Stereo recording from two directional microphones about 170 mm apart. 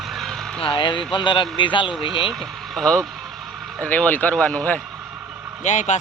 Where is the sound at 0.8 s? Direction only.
30° left (ahead or behind).